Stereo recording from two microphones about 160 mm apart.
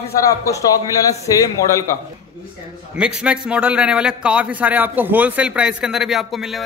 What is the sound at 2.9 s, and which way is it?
A man's voice, 5° right (ahead or behind).